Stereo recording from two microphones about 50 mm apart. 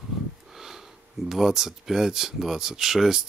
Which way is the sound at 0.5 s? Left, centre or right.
Centre.